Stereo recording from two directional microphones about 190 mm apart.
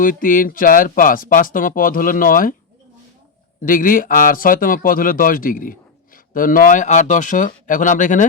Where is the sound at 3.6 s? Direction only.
45° left (ahead or behind).